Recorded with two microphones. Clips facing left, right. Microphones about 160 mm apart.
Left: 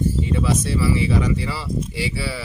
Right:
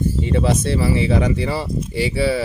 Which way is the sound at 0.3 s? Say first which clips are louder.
Right 3 dB; 60° right (ahead or behind).